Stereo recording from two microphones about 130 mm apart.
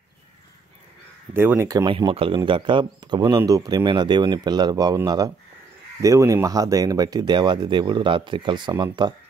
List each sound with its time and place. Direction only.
1.3 s speech: 15° right (ahead or behind)
1.9 s speech: 40° right (ahead or behind)